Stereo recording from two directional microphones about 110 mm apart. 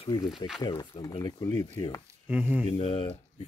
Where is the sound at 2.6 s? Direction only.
55° left (ahead or behind).